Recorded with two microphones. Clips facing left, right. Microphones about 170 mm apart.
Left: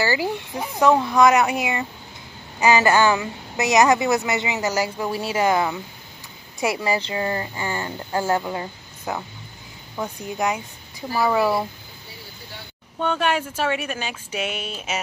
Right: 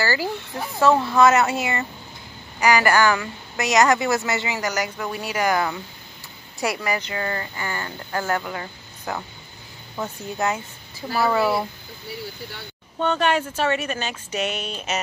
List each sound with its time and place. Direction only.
0.0 s a woman's voice: 20° left (ahead or behind)
10.3 s a woman's voice: 15° left (ahead or behind)
13.0 s speech: 10° left (ahead or behind)